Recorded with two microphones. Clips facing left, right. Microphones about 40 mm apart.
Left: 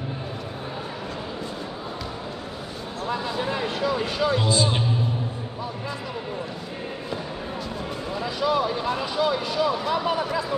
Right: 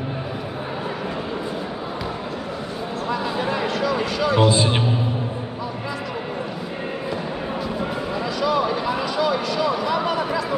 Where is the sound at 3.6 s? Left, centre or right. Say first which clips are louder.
Right 3 dB; right.